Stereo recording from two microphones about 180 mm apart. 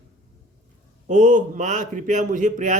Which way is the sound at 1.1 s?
45° right (ahead or behind).